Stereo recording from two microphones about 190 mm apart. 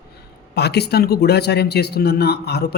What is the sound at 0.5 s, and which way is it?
Speech, 60° left (ahead or behind).